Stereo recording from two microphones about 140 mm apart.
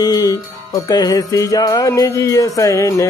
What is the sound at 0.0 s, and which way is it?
Music, 30° left (ahead or behind).